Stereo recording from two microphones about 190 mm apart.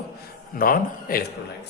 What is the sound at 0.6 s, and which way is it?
Speech, 50° left (ahead or behind).